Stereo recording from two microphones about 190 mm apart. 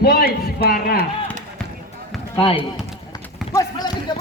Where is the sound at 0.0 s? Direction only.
55° left (ahead or behind).